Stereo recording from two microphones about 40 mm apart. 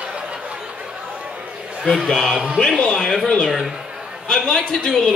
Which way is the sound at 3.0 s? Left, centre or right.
Centre.